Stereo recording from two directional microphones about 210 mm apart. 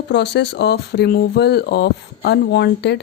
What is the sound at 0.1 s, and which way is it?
Speech, 55° left (ahead or behind).